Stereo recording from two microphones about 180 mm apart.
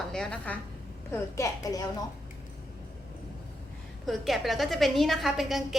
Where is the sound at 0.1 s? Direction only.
5° left (ahead or behind).